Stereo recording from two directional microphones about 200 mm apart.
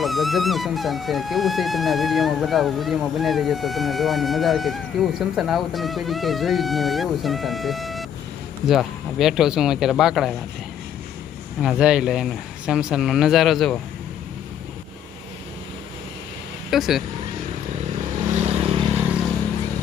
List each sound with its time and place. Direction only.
0.0 s speech: centre (ahead or behind)
11.6 s speech: 5° right (ahead or behind)
16.7 s speech: centre (ahead or behind)
18.4 s vehicle: 30° right (ahead or behind)